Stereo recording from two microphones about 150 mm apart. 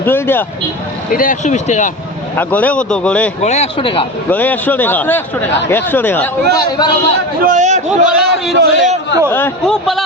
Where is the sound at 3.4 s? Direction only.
45° left (ahead or behind).